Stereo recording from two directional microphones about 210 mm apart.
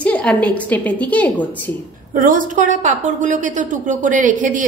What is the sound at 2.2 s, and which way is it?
A woman's voice, 40° right (ahead or behind).